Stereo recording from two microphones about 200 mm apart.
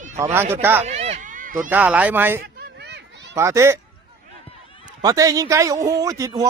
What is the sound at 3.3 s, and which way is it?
Speech, 15° right (ahead or behind).